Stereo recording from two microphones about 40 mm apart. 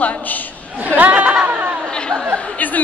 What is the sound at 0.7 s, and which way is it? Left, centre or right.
Chatter, right.